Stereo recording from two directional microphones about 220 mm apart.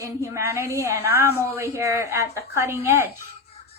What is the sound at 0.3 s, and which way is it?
A woman's voice, 10° right (ahead or behind).